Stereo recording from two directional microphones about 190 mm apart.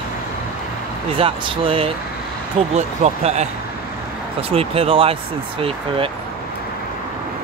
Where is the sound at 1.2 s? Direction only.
30° right (ahead or behind).